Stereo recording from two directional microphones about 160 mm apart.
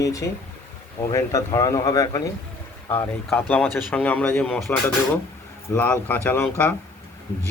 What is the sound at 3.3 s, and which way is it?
Speech, 10° left (ahead or behind).